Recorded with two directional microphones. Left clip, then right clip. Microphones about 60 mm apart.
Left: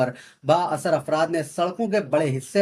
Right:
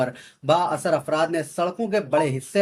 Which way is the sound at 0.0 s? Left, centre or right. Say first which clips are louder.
Left 1 dB; right.